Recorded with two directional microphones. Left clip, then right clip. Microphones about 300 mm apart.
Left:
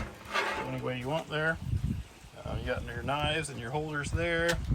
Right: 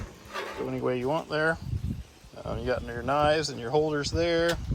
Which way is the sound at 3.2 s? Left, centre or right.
Right.